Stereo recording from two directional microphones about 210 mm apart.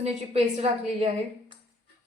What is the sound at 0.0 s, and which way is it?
A woman's voice, 30° right (ahead or behind).